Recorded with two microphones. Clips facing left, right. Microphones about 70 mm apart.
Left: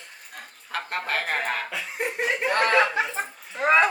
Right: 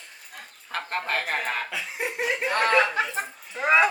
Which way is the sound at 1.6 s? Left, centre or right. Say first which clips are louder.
Left 1 dB; centre.